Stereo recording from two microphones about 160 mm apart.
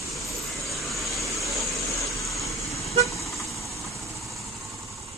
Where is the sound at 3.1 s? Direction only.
Centre (ahead or behind).